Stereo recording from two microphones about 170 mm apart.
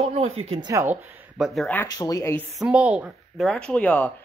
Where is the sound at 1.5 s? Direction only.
Centre (ahead or behind).